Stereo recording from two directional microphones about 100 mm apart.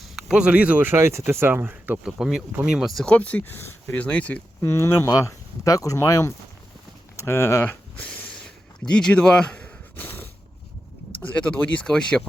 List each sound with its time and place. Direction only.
0.2 s speech: 5° right (ahead or behind)
2.1 s speech: 5° right (ahead or behind)
3.1 s speech: 15° left (ahead or behind)
3.9 s speech: 15° left (ahead or behind)
4.6 s speech: 25° left (ahead or behind)
7.2 s a sound: 25° left (ahead or behind)
11.1 s speech: 15° left (ahead or behind)